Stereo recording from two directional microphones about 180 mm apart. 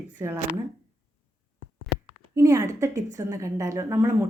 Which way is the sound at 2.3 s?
15° right (ahead or behind).